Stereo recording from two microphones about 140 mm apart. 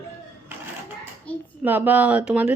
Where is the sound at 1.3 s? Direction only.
10° left (ahead or behind).